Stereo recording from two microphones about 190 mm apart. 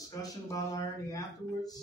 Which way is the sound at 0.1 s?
20° left (ahead or behind).